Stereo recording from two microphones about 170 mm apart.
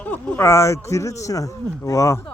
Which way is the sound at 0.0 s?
10° left (ahead or behind).